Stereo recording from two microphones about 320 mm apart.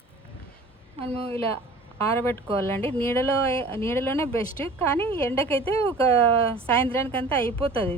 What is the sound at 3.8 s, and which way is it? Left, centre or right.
Speech, centre.